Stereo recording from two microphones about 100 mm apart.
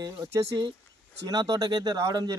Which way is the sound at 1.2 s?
35° right (ahead or behind).